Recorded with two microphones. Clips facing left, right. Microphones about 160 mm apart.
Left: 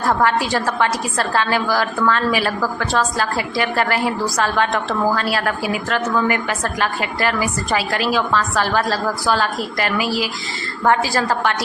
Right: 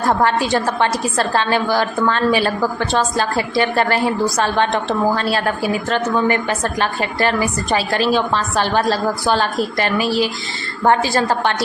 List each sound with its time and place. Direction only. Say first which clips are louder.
0.1 s a woman's voice: right 1 dB; 25° right (ahead or behind)